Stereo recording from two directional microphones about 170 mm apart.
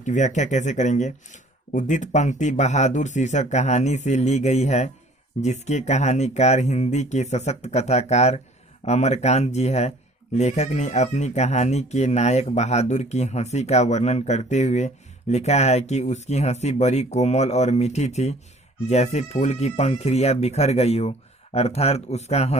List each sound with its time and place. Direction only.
0.0 s speech: 45° left (ahead or behind)